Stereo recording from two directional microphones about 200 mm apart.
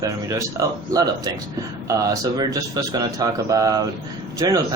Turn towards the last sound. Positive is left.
turn(degrees=-20)  # may be behind; listen again after turning